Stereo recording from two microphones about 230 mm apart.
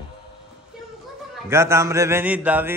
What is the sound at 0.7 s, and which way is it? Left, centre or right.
Music, centre.